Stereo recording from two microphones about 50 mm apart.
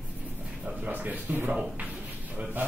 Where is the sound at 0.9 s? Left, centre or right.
Right.